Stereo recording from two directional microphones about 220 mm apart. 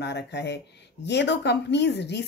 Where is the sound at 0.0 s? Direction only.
50° left (ahead or behind).